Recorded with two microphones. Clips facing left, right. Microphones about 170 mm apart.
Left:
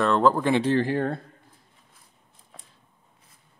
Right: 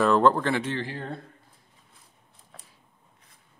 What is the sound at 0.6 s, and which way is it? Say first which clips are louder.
Speech: left 9 dB; 45° left (ahead or behind).